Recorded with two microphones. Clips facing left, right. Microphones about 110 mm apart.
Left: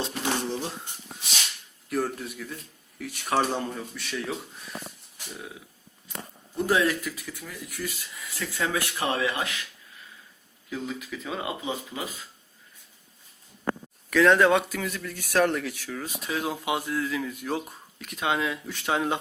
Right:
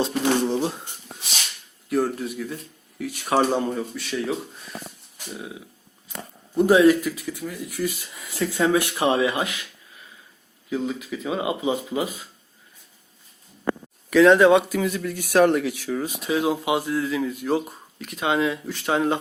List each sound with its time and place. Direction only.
0.0 s a sound: 20° right (ahead or behind)
1.9 s speech: 5° right (ahead or behind)
7.8 s speech: 25° right (ahead or behind)
10.7 s speech: 5° right (ahead or behind)
14.1 s speech: 10° right (ahead or behind)